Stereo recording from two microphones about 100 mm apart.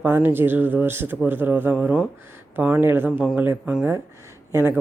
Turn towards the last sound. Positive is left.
turn(degrees=-20)  # may be behind; listen again after turning